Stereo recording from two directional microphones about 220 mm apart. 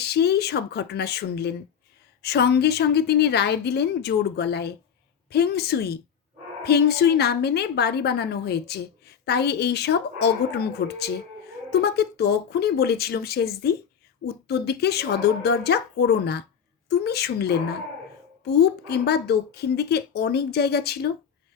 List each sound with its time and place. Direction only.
0.0 s a woman's voice: 50° left (ahead or behind)